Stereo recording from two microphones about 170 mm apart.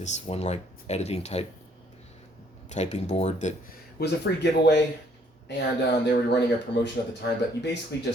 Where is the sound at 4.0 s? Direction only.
85° left.